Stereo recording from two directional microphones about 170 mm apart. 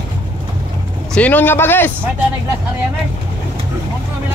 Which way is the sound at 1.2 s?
10° left (ahead or behind).